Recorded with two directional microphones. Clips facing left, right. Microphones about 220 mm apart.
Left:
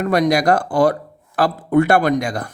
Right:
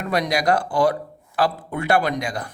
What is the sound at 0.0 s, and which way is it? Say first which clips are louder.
Speech: left 6 dB; 50° left (ahead or behind).